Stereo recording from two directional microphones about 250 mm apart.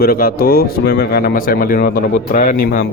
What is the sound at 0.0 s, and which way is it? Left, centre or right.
Speech, left.